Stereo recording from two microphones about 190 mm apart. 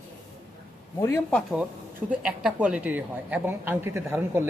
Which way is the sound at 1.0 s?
5° left (ahead or behind).